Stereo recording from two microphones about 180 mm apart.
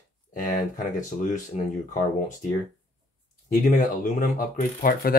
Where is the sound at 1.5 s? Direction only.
40° left (ahead or behind).